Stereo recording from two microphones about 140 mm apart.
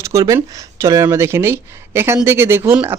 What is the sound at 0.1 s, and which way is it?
Speech, 20° right (ahead or behind).